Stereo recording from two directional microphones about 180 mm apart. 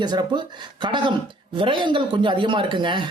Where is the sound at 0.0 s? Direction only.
25° right (ahead or behind).